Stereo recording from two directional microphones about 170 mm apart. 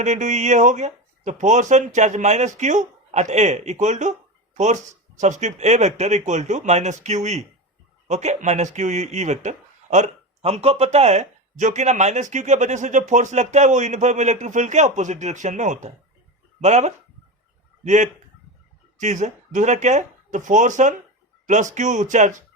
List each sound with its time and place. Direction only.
0.0 s speech: 45° right (ahead or behind)